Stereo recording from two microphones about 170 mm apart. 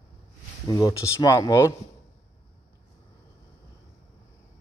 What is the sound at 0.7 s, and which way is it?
Speech, 20° left (ahead or behind).